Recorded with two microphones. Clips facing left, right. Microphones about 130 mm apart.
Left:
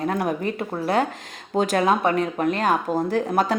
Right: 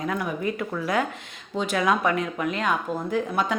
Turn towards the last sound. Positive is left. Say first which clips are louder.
# left 4 dB
turn(degrees=40)  # may be behind; listen again after turning